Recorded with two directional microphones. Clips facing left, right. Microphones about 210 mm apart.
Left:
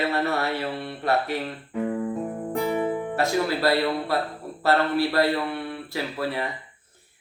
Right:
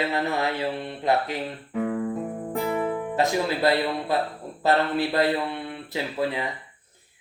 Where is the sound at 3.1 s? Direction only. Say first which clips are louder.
Right 1 dB; 20° right (ahead or behind).